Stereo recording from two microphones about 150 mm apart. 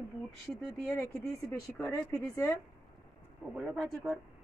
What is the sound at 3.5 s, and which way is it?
Speech, centre (ahead or behind).